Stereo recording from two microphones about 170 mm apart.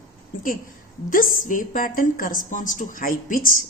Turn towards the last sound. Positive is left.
turn(degrees=55)  # may be behind; listen again after turning